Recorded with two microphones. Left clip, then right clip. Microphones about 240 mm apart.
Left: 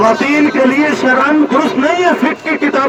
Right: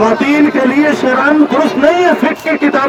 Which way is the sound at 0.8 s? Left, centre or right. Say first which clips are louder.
Right 1 dB; centre.